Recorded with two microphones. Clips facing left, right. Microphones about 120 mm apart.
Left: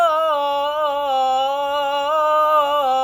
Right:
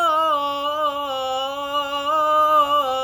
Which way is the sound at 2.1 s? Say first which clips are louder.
Even; 55° left (ahead or behind).